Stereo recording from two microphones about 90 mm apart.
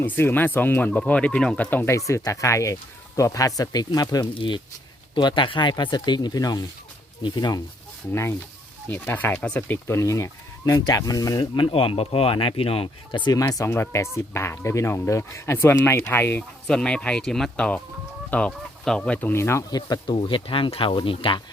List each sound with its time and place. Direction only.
0.0 s speech: 25° left (ahead or behind)
1.9 s speech: 35° left (ahead or behind)
4.4 s speech: 60° left (ahead or behind); by 6.6 s 45° left (ahead or behind)
7.2 s speech: 55° left (ahead or behind)
8.1 s speech: 30° left (ahead or behind)
9.7 s speech: 35° left (ahead or behind)
11.5 s speech: 85° left; by 13.3 s 60° left (ahead or behind)
13.4 s speech: 35° left (ahead or behind)
16.6 s speech: 10° left (ahead or behind)
19.3 s speech: 30° left (ahead or behind)
19.7 s speech: 50° left (ahead or behind)
20.1 s speech: 80° left